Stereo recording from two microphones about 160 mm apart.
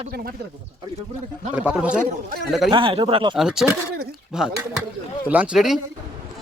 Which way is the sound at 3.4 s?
5° right (ahead or behind).